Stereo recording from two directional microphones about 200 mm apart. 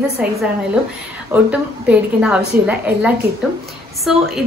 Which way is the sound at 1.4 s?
5° right (ahead or behind).